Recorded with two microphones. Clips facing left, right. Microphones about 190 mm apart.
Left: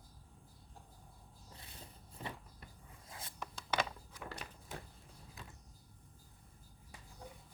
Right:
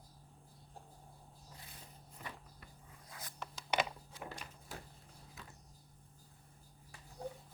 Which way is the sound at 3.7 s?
15° right (ahead or behind).